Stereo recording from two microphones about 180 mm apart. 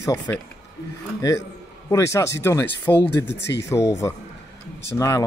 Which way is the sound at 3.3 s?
70° left (ahead or behind).